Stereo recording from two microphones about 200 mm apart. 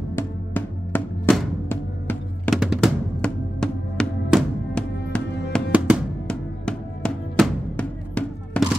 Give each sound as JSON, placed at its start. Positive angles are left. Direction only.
{"t": 0.1, "sound": "music", "side_deg": 10}
{"t": 2.6, "sound": "drum", "side_deg": 0}